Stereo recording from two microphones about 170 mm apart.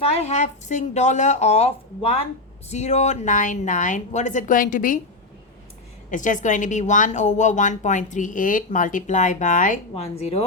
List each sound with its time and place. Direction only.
0.0 s a woman's voice: 40° left (ahead or behind); by 4.9 s 55° left (ahead or behind)
6.1 s a woman's voice: 50° left (ahead or behind)
9.9 s speech: 40° left (ahead or behind)